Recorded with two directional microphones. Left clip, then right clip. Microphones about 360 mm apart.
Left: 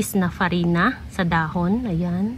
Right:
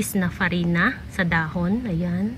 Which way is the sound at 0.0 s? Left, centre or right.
Centre.